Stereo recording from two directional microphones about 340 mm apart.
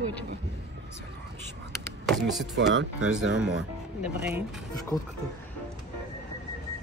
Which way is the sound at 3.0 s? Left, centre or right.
Centre.